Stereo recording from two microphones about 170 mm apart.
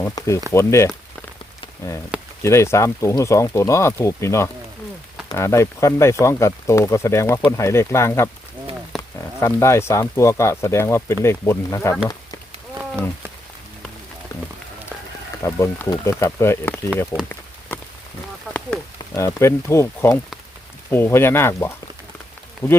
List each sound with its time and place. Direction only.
0.0 s speech: 20° left (ahead or behind)
2.4 s speech: 15° left (ahead or behind)
15.4 s speech: 15° left (ahead or behind)
17.1 s speech: 15° right (ahead or behind)
18.9 s speech: 15° left (ahead or behind)